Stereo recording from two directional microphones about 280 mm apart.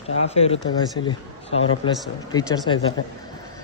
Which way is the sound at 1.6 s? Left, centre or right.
Centre.